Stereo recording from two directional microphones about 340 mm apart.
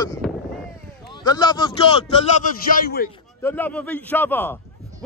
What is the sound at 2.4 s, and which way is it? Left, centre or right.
Speech, left.